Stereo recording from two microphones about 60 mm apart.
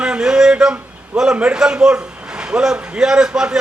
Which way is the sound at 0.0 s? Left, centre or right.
Centre.